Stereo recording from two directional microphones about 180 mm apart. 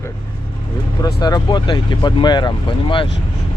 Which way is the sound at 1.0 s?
20° left (ahead or behind).